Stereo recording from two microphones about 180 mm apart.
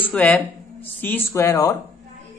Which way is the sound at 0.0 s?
10° left (ahead or behind).